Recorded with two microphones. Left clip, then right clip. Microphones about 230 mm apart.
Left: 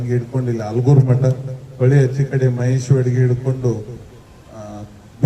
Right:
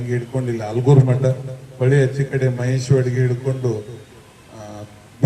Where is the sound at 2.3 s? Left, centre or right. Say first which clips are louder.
Left 3 dB; left.